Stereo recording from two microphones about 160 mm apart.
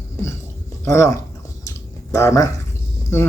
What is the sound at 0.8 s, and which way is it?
Speech, 20° left (ahead or behind).